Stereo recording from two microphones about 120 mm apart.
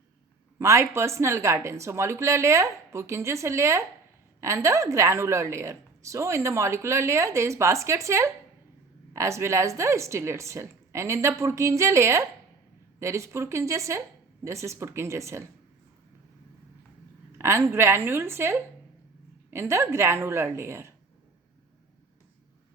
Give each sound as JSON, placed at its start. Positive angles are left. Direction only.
{"t": 0.6, "sound": "speech", "side_deg": -25}
{"t": 17.3, "sound": "speech", "side_deg": -20}